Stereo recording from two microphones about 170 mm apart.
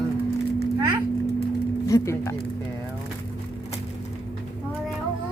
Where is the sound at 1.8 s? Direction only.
20° left (ahead or behind).